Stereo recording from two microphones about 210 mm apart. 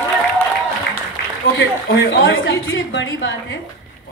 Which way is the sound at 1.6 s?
65° left (ahead or behind).